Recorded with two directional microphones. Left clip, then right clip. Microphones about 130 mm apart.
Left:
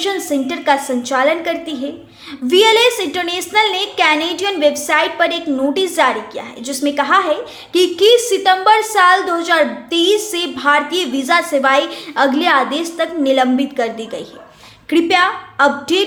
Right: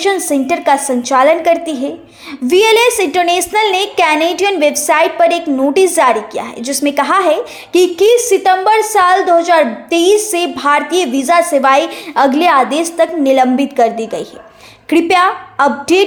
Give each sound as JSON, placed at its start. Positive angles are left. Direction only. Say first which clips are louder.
{"t": 0.3, "sound": "a woman's voice", "louder": "right 4 dB", "side_deg": -35}